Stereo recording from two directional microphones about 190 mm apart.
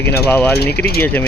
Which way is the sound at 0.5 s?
60° left (ahead or behind).